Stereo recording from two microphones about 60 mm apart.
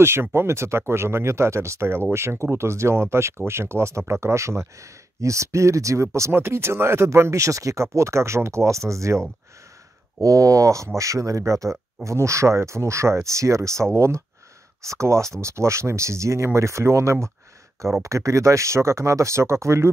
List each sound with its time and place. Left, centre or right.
0.0 s speech: right
6.3 s speech: right
10.2 s speech: right